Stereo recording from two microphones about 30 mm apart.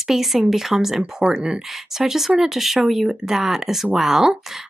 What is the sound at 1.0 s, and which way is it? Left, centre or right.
Speech, right.